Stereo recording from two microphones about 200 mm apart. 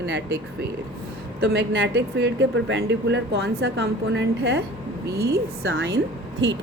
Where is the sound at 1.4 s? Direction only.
65° right (ahead or behind).